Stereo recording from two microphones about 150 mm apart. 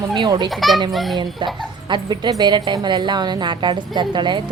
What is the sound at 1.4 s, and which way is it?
A woman's voice, 30° right (ahead or behind).